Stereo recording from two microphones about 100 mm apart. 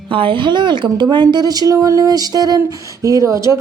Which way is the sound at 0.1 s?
60° right (ahead or behind).